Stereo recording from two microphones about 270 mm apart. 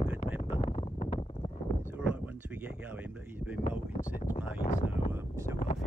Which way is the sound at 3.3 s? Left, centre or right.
Centre.